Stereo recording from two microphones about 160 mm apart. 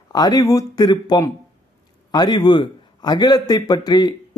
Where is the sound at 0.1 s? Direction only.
25° left (ahead or behind).